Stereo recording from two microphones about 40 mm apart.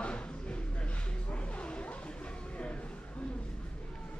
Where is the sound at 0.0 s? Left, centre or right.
Left.